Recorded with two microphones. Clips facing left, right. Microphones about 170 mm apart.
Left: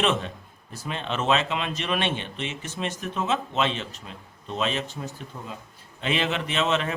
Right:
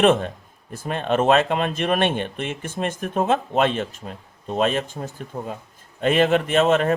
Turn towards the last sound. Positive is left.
turn(degrees=-50)  # may be behind; listen again after turning